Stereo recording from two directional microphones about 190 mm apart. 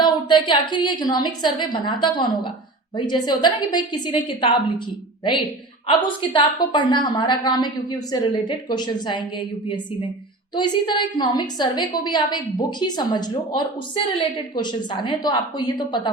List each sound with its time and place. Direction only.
0.0 s a woman's voice: 25° left (ahead or behind)
5.9 s a woman's voice: 25° left (ahead or behind)
10.5 s a woman's voice: 25° left (ahead or behind)